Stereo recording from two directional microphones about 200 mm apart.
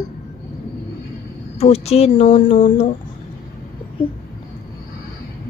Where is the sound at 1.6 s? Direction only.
30° left (ahead or behind).